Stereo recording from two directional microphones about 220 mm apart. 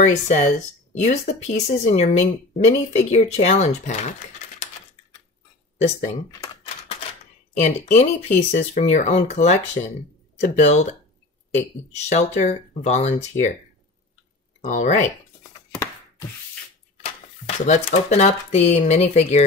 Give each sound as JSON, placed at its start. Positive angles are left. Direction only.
{"t": 0.0, "sound": "speech", "side_deg": 35}
{"t": 5.8, "sound": "speech", "side_deg": 35}
{"t": 6.4, "sound": "typewriter", "side_deg": 20}
{"t": 7.5, "sound": "speech", "side_deg": 30}
{"t": 14.6, "sound": "speech", "side_deg": 30}
{"t": 17.6, "sound": "speech", "side_deg": 30}